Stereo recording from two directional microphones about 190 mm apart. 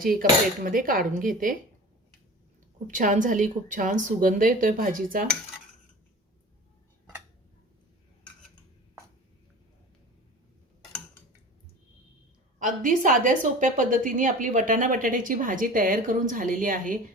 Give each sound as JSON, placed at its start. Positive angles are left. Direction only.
{"t": 0.0, "sound": "a woman's voice", "side_deg": -50}
{"t": 2.8, "sound": "a woman's voice", "side_deg": -40}
{"t": 12.5, "sound": "a woman's voice", "side_deg": -40}